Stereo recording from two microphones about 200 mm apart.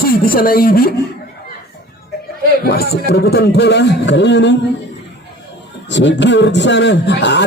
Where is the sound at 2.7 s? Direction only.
50° left (ahead or behind).